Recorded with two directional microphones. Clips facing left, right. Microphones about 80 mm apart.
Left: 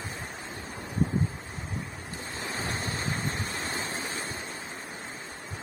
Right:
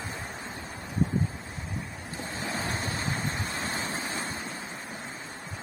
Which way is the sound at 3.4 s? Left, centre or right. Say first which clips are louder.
Right 1 dB; right.